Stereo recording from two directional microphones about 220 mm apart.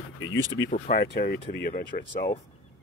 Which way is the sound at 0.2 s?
60° left (ahead or behind).